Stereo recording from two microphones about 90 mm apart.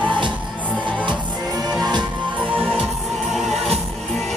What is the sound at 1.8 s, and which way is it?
Music, 55° right (ahead or behind).